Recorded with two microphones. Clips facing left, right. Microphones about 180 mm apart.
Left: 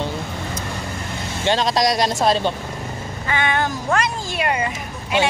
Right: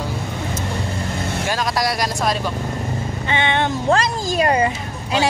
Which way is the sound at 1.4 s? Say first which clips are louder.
Left 5 dB; 25° left (ahead or behind).